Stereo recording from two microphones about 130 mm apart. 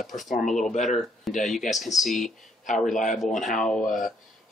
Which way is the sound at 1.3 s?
Centre (ahead or behind).